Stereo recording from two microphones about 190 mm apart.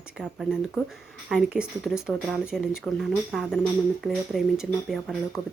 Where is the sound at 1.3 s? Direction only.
5° right (ahead or behind).